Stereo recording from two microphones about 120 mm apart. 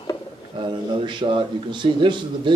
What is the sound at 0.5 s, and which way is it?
A man's voice, 40° right (ahead or behind).